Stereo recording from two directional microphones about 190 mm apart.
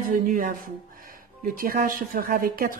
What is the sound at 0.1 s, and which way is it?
Speech, 45° right (ahead or behind).